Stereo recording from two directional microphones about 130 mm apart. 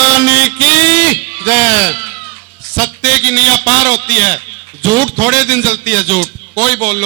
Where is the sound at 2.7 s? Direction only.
10° left (ahead or behind).